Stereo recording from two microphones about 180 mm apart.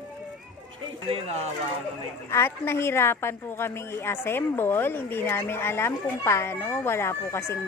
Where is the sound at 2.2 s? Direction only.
15° left (ahead or behind).